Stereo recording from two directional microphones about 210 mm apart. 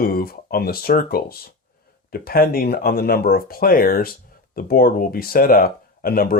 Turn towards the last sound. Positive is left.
turn(degrees=45)  # may be behind; listen again after turning